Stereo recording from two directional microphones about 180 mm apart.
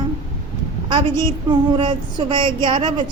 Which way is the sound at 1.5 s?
30° right (ahead or behind).